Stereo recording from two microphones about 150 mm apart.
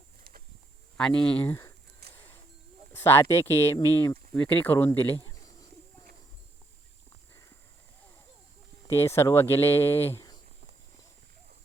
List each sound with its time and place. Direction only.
0.9 s speech: 5° left (ahead or behind)
2.1 s a sound: 15° left (ahead or behind)
2.9 s speech: 15° left (ahead or behind)
8.9 s speech: 15° left (ahead or behind)